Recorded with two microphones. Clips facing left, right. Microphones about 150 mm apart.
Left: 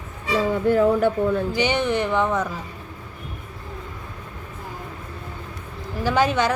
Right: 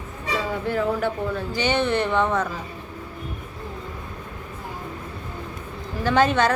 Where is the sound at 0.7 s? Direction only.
50° left (ahead or behind).